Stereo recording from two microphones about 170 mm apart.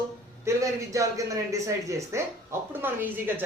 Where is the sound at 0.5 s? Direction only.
20° right (ahead or behind).